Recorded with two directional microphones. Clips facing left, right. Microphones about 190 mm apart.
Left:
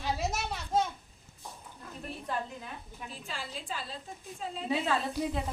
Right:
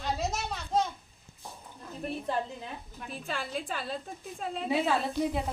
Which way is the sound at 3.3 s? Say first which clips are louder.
Right 6 dB; 55° right (ahead or behind).